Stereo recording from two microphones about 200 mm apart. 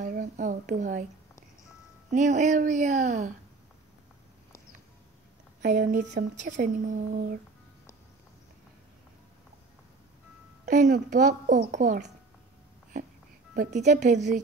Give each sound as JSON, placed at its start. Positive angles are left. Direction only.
{"t": 0.0, "sound": "a sound", "side_deg": -40}
{"t": 2.0, "sound": "speech", "side_deg": -35}
{"t": 5.6, "sound": "speech", "side_deg": -40}
{"t": 10.6, "sound": "speech", "side_deg": -40}
{"t": 13.6, "sound": "speech", "side_deg": -35}